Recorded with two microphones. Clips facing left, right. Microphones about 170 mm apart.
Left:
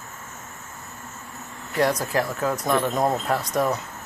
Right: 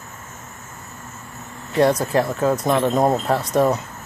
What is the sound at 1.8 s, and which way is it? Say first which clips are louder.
Speech: right 5 dB; 25° right (ahead or behind).